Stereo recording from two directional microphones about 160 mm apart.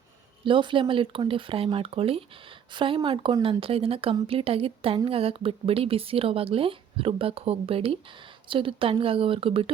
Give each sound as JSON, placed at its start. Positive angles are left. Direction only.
{"t": 0.4, "sound": "speech", "side_deg": -30}